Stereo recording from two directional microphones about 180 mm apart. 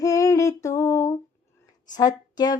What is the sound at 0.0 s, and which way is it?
Female singing, 20° left (ahead or behind).